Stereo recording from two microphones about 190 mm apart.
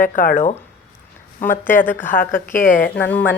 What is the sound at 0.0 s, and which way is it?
Speech, 45° left (ahead or behind).